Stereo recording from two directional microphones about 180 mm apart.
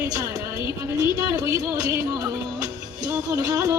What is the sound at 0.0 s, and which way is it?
Speech, 20° right (ahead or behind).